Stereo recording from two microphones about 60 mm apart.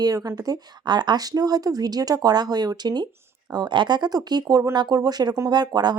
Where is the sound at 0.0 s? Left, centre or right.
Right.